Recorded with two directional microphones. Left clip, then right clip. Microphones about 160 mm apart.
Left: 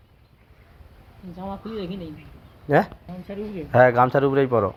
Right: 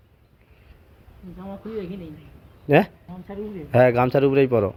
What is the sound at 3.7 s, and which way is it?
Speech, 50° right (ahead or behind).